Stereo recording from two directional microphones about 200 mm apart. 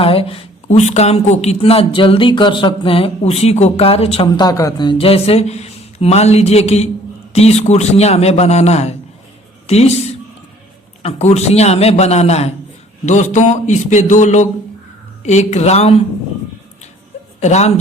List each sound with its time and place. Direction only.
0.0 s a man's voice: 30° left (ahead or behind)
11.0 s a man's voice: 35° left (ahead or behind)
17.4 s a man's voice: 35° left (ahead or behind)